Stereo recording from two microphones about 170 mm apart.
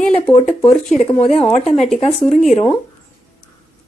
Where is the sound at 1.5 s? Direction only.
40° left (ahead or behind).